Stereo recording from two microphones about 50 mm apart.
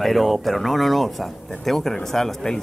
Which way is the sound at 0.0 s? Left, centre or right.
Centre.